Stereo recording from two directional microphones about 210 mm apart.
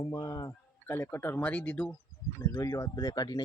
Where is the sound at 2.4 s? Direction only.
20° left (ahead or behind).